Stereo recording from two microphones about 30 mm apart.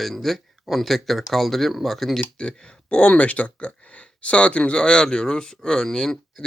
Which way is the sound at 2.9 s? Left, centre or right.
Left.